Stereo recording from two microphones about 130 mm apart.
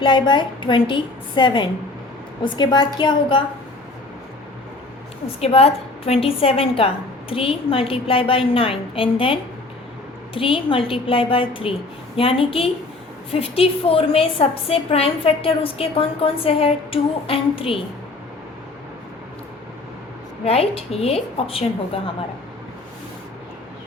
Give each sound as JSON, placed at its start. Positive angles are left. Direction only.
{"t": 0.0, "sound": "a woman's voice", "side_deg": 35}
{"t": 5.4, "sound": "a woman's voice", "side_deg": 50}
{"t": 20.4, "sound": "a woman's voice", "side_deg": 50}